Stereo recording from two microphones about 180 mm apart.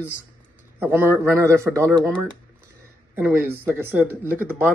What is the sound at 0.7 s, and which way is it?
A man's voice, 10° right (ahead or behind).